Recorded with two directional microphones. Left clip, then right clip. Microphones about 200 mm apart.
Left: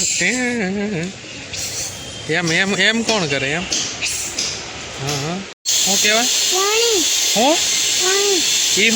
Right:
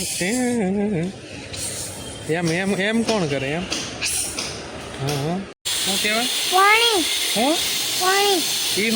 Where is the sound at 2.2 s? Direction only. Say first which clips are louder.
Left 5 dB; 5° right (ahead or behind).